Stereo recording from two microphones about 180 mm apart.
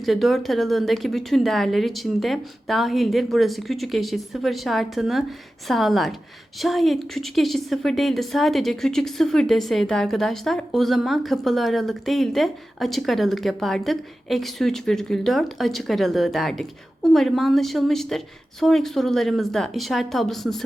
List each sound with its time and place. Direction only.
0.0 s a woman's voice: centre (ahead or behind)